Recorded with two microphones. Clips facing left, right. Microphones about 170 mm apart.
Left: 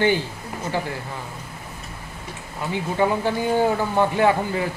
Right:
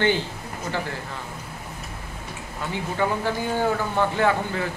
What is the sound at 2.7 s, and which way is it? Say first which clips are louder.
Speech: left 4 dB; 15° left (ahead or behind).